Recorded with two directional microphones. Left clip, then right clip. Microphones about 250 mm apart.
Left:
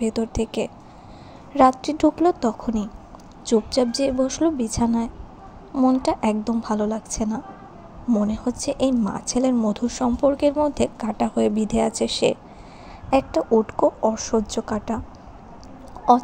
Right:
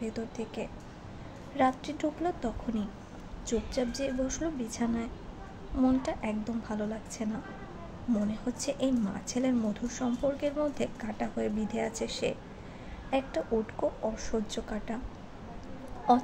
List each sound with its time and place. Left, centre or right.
0.0 s a woman's voice: left